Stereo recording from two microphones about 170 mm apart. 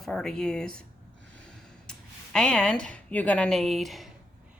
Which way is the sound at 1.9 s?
5° left (ahead or behind).